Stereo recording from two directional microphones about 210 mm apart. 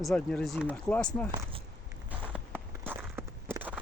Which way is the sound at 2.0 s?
5° right (ahead or behind).